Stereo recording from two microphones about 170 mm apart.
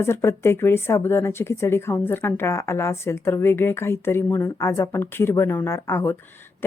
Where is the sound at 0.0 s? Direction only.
15° left (ahead or behind).